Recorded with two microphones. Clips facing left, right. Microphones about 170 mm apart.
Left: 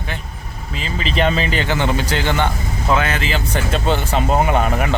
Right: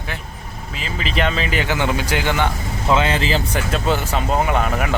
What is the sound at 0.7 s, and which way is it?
Speech, 5° right (ahead or behind).